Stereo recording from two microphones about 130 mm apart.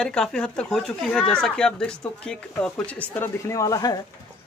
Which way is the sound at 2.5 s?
15° left (ahead or behind).